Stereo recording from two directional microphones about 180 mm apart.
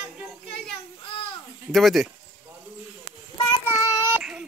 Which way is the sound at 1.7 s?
Centre (ahead or behind).